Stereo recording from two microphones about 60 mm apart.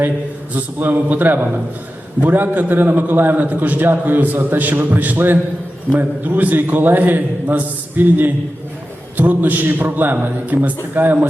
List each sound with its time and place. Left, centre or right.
0.5 s a man's voice: right